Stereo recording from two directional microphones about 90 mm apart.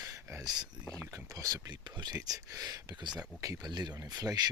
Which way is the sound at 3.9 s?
40° right (ahead or behind).